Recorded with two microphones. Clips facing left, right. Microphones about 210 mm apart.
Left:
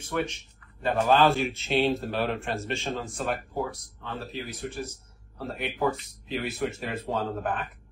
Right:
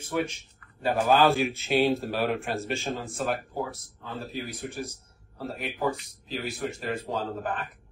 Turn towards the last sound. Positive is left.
turn(degrees=0)  # may be behind; listen again after turning